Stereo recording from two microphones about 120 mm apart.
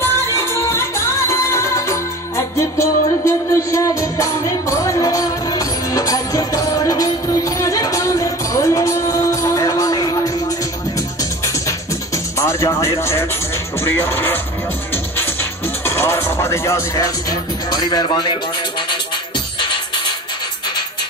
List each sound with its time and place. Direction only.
0.0 s music: 20° left (ahead or behind)
12.4 s speech: 25° left (ahead or behind)
15.8 s music: 20° left (ahead or behind); by 18.4 s 40° left (ahead or behind)
19.6 s music: 40° left (ahead or behind)